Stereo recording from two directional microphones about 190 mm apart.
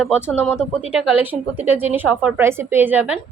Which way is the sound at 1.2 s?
10° right (ahead or behind).